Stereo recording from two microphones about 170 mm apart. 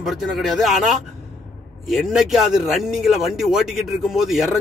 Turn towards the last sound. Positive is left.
turn(degrees=0)  # may be behind; listen again after turning